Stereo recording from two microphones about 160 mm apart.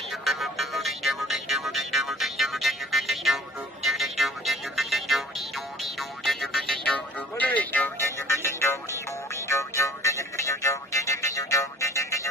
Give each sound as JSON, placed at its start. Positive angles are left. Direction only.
{"t": 0.1, "sound": "music", "side_deg": 0}